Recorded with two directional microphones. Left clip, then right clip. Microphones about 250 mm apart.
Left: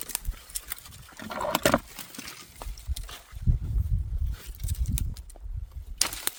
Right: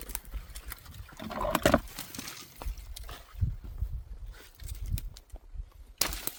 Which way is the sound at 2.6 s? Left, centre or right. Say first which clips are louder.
Left 4 dB; left.